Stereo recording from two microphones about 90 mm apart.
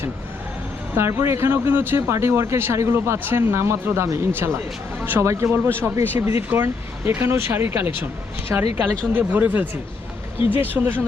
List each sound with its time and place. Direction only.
0.9 s speech: 30° right (ahead or behind)